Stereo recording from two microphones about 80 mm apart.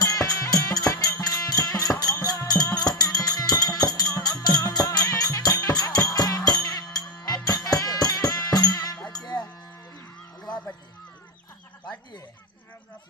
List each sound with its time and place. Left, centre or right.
0.0 s music: left
6.6 s music: left
7.4 s music: left
9.1 s a sound: left